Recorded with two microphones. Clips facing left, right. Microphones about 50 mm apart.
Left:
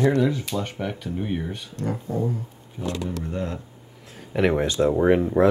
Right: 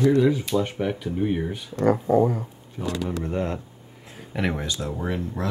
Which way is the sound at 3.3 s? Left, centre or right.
Right.